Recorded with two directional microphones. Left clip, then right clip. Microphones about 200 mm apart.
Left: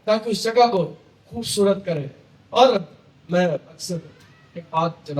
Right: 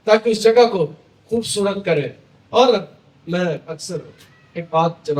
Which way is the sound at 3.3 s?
55° right (ahead or behind).